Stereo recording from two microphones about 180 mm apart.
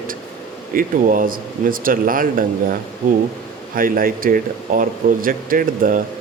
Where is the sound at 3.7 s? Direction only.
50° right (ahead or behind).